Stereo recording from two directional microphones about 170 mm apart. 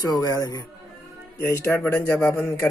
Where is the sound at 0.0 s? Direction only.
25° left (ahead or behind).